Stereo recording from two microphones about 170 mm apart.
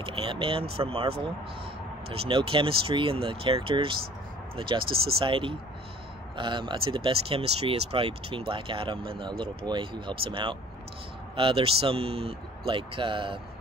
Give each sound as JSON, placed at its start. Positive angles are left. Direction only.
{"t": 0.0, "sound": "speech", "side_deg": -30}
{"t": 4.8, "sound": "speech", "side_deg": -65}
{"t": 5.2, "sound": "speech", "side_deg": -30}